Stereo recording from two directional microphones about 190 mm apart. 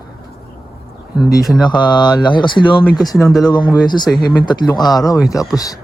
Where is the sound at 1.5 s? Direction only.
25° left (ahead or behind).